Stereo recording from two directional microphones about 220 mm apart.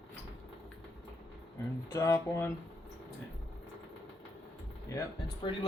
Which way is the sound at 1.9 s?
10° left (ahead or behind).